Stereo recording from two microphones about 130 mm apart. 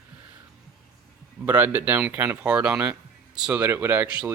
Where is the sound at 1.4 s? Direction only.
15° right (ahead or behind).